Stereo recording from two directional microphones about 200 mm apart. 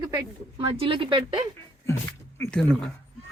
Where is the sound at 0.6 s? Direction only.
25° right (ahead or behind).